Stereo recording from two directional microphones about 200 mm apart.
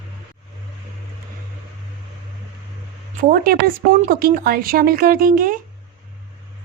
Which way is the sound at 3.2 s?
50° right (ahead or behind).